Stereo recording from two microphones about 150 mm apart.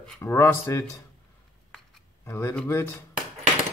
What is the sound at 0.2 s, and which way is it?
Speech, 15° left (ahead or behind).